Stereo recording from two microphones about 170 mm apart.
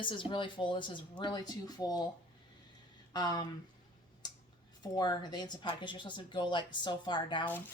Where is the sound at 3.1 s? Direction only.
25° left (ahead or behind).